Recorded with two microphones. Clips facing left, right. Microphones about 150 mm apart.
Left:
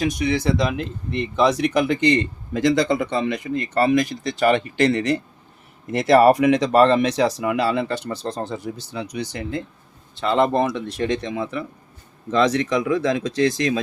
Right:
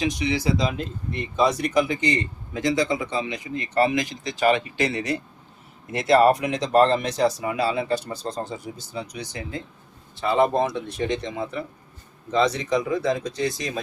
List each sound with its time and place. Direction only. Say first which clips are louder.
0.2 s a man's voice: left 3 dB; 55° left (ahead or behind)
1.1 s a man's voice: left 3 dB; 75° left (ahead or behind); by 5.1 s 60° left (ahead or behind)
6.2 s speech: left 5 dB; 65° left (ahead or behind)
12.3 s speech: left 3 dB; 90° left